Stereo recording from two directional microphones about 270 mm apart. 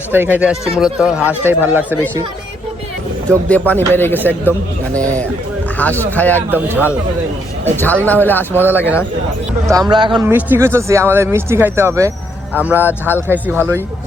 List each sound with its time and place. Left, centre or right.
0.1 s speech: centre
3.7 s a man's voice: centre
5.7 s speech: centre
7.6 s a man's voice: centre
9.6 s speech: centre